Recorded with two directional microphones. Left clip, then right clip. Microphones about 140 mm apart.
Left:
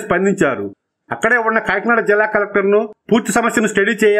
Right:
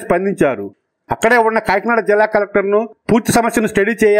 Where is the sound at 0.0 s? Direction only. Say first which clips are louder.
Right 1 dB; 35° right (ahead or behind).